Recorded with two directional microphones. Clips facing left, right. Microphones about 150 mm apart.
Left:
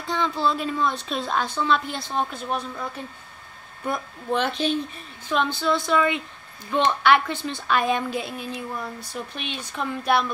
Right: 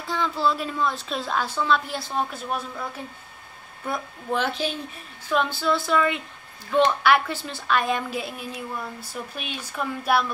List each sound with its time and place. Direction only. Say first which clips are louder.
0.0 s a woman's voice: even; 5° right (ahead or behind)
3.9 s a woman's voice: left 1 dB; 5° right (ahead or behind)